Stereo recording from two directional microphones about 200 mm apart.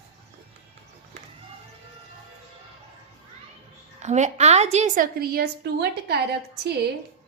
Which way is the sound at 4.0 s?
35° right (ahead or behind).